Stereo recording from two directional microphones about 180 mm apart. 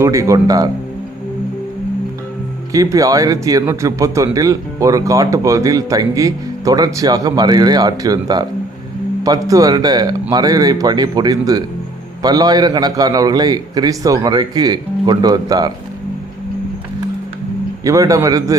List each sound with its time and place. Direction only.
0.0 s speech: 15° right (ahead or behind)
2.7 s speech: 20° right (ahead or behind)
17.8 s a man's voice: 20° right (ahead or behind)